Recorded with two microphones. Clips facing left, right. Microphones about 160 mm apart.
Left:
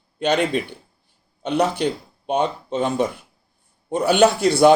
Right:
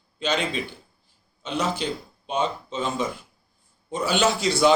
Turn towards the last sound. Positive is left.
turn(degrees=55)  # may be behind; listen again after turning